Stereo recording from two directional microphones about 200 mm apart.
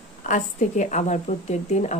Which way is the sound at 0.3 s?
40° left (ahead or behind).